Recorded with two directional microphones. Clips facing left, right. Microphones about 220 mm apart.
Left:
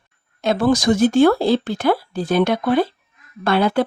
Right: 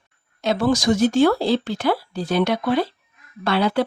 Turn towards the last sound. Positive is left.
turn(degrees=50)  # may be behind; listen again after turning